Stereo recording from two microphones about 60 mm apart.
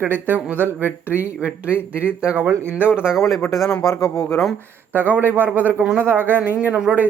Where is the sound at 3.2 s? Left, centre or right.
Centre.